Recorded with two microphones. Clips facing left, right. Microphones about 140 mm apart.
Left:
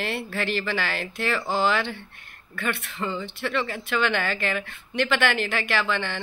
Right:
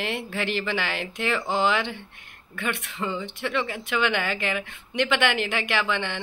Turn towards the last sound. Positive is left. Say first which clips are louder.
# even
turn(degrees=-15)  # may be behind; listen again after turning